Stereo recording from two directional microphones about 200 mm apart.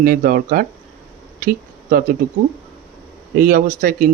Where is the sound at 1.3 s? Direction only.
45° right (ahead or behind).